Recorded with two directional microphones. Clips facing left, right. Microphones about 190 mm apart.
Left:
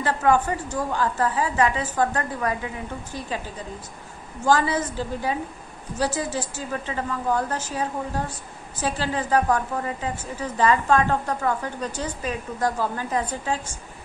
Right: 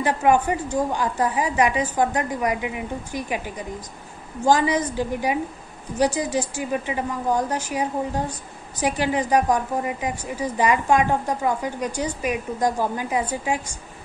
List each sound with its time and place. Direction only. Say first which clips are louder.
0.0 s a woman's voice: right 2 dB; 15° right (ahead or behind)